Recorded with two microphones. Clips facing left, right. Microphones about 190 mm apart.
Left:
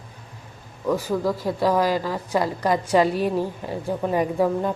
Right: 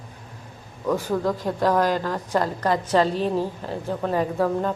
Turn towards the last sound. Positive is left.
turn(degrees=10)  # may be behind; listen again after turning